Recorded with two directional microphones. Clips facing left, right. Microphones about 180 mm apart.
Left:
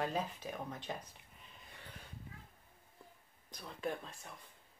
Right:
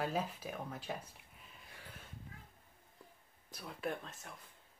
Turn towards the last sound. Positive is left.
turn(degrees=0)  # may be behind; listen again after turning